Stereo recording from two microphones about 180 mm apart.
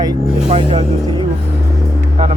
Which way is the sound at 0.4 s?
30° right (ahead or behind).